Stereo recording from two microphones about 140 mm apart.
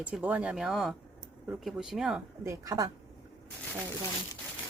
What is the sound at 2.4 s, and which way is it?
Speech, 25° right (ahead or behind).